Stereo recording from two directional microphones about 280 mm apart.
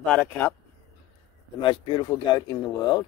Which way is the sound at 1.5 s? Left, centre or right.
Centre.